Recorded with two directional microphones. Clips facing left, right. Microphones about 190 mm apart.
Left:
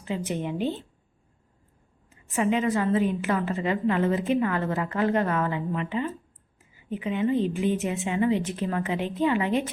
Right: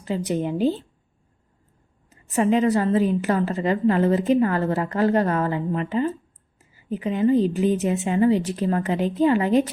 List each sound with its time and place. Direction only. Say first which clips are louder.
0.0 s a woman's voice: right 5 dB; 35° right (ahead or behind)
2.0 s a woman's voice: right 4 dB; 40° right (ahead or behind)